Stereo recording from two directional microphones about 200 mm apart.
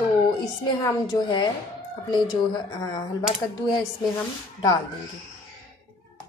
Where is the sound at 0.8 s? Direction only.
20° left (ahead or behind).